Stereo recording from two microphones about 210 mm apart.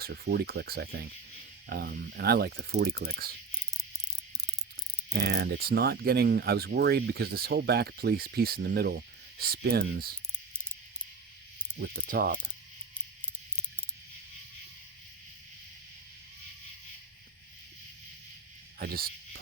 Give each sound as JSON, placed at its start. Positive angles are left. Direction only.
{"t": 0.0, "sound": "speech", "side_deg": -50}
{"t": 5.1, "sound": "speech", "side_deg": -50}
{"t": 11.8, "sound": "speech", "side_deg": -45}
{"t": 18.8, "sound": "speech", "side_deg": -45}